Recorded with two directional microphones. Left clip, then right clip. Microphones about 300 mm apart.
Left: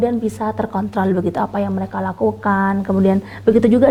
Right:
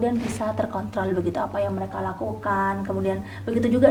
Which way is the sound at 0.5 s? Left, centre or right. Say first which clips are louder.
Left 5 dB; left.